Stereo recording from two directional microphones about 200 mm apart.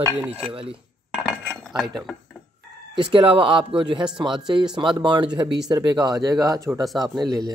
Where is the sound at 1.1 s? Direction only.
Centre (ahead or behind).